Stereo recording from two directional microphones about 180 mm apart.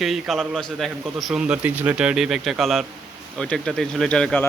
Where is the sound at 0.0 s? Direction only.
Centre (ahead or behind).